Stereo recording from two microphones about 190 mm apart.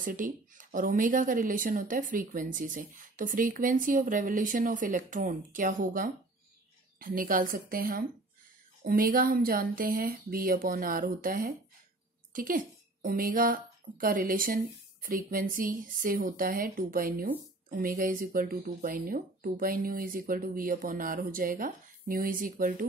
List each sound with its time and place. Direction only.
0.0 s speech: 45° right (ahead or behind)